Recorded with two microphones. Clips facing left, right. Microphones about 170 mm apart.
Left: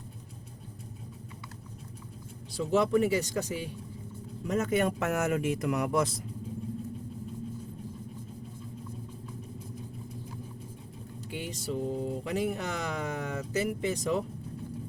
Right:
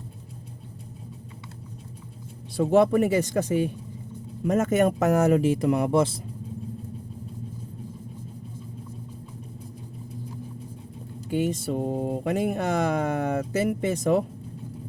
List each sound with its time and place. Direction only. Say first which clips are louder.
2.6 s speech: right 6 dB; 55° right (ahead or behind); by 6.1 s 30° right (ahead or behind)
11.3 s speech: right 10 dB; 50° right (ahead or behind)